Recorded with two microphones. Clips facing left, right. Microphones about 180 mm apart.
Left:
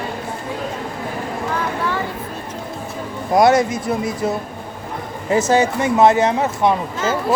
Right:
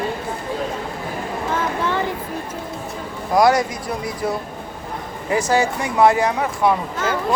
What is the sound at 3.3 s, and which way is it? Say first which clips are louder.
Speech: left 2 dB; 25° left (ahead or behind).